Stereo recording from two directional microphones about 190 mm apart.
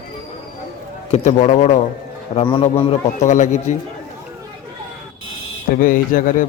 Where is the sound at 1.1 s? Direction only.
35° left (ahead or behind).